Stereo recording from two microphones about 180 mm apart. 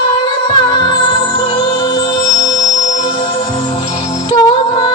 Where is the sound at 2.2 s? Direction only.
20° left (ahead or behind).